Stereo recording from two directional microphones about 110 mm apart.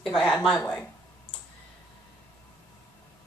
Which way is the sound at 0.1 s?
Centre (ahead or behind).